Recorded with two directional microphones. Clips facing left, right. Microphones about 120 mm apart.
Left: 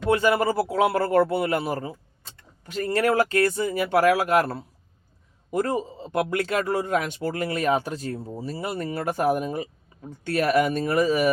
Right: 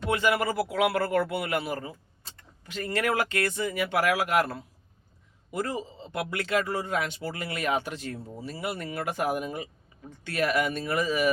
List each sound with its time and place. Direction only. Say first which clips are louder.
0.1 s speech: left 5 dB; 35° left (ahead or behind)
5.5 s speech: left 6 dB; 45° left (ahead or behind)